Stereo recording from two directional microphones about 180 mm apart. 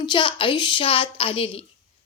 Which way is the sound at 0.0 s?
25° left (ahead or behind).